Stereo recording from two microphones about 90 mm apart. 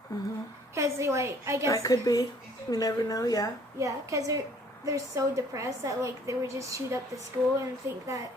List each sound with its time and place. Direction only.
0.1 s speech: 45° left (ahead or behind)
0.7 s a woman's voice: 30° right (ahead or behind)
1.6 s a woman's voice: 40° left (ahead or behind)
3.8 s a woman's voice: 35° right (ahead or behind)